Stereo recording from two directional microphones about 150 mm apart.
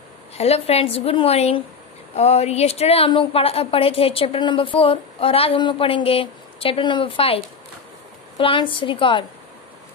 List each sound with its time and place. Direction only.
0.4 s a woman's voice: 45° left (ahead or behind)